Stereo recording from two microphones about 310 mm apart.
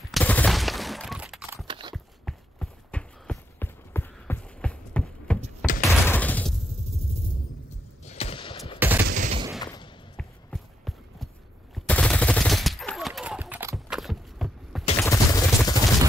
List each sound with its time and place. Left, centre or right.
0.1 s a sound: centre
1.7 s biting: centre
2.2 s clip-clop: centre
5.8 s fusillade: centre
8.0 s gunshot: centre
8.7 s fusillade: centre
9.0 s fusillade: right
9.6 s a sound: centre
10.1 s a sound: centre
11.7 s fusillade: centre
15.0 s fusillade: centre